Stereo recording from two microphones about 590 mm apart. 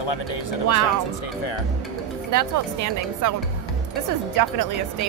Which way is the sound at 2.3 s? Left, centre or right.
Right.